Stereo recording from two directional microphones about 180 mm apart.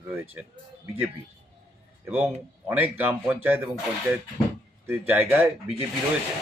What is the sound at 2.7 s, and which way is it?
A man's voice, 10° right (ahead or behind).